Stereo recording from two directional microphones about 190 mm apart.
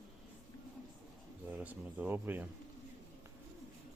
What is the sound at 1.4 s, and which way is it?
Speech, 10° right (ahead or behind).